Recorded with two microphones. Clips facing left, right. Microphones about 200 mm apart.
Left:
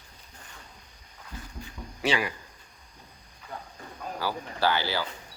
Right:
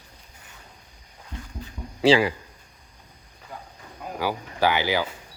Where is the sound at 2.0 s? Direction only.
30° right (ahead or behind).